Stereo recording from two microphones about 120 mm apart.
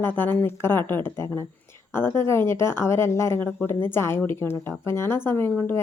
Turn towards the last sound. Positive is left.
turn(degrees=15)  # may be behind; listen again after turning